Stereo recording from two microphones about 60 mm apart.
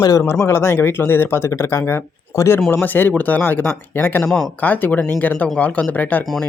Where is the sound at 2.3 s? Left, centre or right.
Left.